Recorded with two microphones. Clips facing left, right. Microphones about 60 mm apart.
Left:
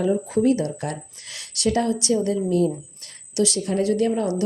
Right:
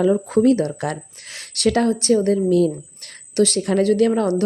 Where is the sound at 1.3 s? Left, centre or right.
Right.